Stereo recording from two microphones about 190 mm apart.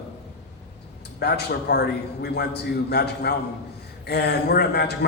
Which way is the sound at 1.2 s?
60° left (ahead or behind).